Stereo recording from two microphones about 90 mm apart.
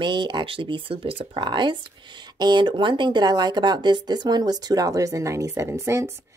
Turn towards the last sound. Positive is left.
turn(degrees=-30)  # may be behind; listen again after turning